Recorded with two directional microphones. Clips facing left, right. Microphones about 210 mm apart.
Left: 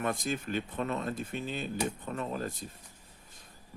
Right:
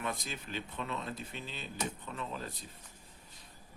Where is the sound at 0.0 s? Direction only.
50° left (ahead or behind).